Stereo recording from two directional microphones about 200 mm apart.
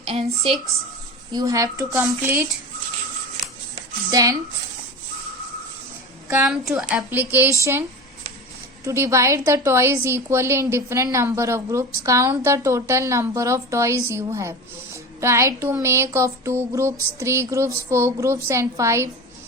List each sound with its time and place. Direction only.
0.0 s a sound: 30° right (ahead or behind)
1.3 s a woman's voice: 20° right (ahead or behind)
4.1 s a woman's voice: 15° right (ahead or behind)
6.4 s a woman's voice: centre (ahead or behind)